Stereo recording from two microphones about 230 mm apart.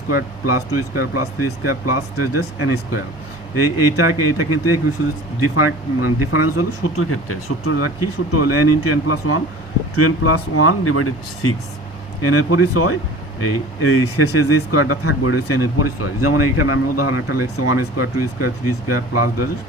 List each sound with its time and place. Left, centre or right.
0.1 s speech: left